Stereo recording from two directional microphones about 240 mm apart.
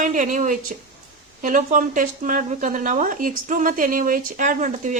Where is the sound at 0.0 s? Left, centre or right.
Right.